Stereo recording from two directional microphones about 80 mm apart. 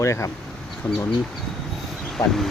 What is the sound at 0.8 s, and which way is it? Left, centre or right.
Speech, left.